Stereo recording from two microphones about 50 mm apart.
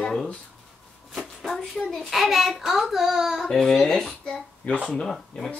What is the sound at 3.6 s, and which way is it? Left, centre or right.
Speech, centre.